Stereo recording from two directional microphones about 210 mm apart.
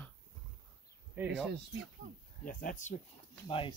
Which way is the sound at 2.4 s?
40° left (ahead or behind).